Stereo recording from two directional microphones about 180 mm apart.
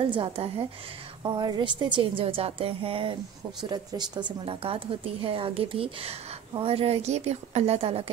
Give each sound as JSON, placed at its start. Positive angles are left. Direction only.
{"t": 0.0, "sound": "a woman's voice", "side_deg": -30}